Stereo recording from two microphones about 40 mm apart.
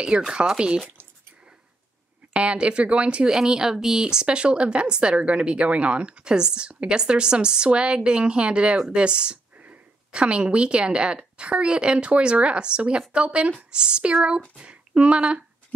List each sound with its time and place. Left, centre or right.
0.3 s a woman's voice: right
2.3 s a woman's voice: right
3.3 s a woman's voice: centre; by 15.4 s right